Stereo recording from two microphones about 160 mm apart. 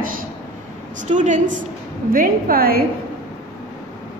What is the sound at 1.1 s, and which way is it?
Speech, 50° right (ahead or behind).